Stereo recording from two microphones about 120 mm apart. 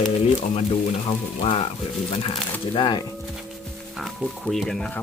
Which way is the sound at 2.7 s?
40° left (ahead or behind).